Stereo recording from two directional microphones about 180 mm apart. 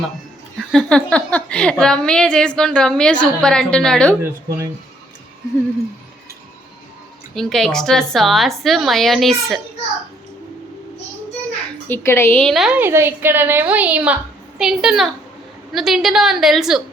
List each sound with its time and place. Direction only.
0.7 s speech: 5° left (ahead or behind)
4.2 s a woman's voice: 15° right (ahead or behind)
7.3 s speech: centre (ahead or behind)
11.9 s a woman's voice: 15° left (ahead or behind); by 16.8 s centre (ahead or behind)